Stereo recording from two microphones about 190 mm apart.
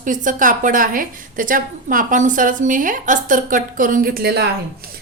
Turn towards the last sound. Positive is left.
turn(degrees=-55)  # may be behind; listen again after turning